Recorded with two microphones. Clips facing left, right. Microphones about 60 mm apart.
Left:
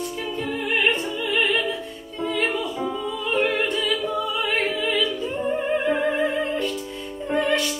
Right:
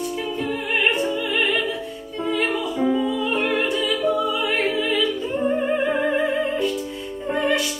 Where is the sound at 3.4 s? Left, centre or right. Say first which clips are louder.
Right 1 dB; centre.